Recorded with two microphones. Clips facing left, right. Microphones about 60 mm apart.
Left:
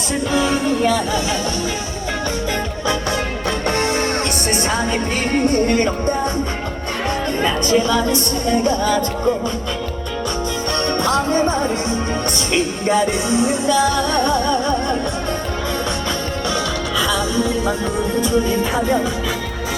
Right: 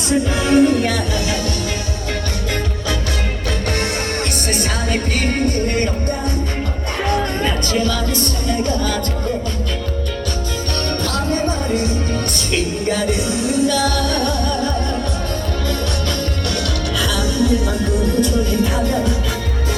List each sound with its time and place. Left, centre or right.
0.3 s music: centre
3.7 s music: left
7.7 s music: left
10.8 s music: left
13.8 s music: left
17.0 s music: centre